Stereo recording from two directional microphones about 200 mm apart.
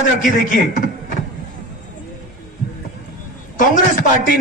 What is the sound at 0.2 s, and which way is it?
Speech, 40° left (ahead or behind).